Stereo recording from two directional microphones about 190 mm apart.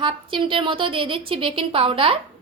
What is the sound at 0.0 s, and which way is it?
A woman's voice, 25° right (ahead or behind).